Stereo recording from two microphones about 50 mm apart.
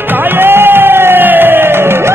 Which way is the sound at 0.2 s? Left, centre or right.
Right.